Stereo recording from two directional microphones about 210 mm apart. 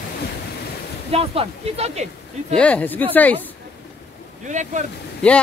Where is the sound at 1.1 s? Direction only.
25° right (ahead or behind).